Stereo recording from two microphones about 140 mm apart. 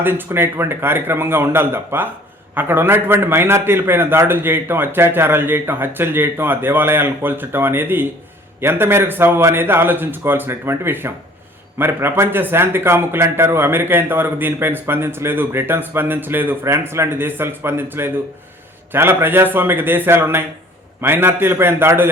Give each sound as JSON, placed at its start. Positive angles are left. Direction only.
{"t": 0.0, "sound": "speech", "side_deg": -15}